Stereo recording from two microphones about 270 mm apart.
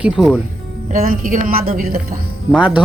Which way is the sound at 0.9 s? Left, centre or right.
Right.